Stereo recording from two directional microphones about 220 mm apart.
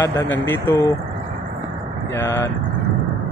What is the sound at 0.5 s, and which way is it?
Speech, 10° left (ahead or behind).